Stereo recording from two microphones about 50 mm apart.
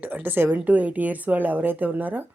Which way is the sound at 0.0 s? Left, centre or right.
Right.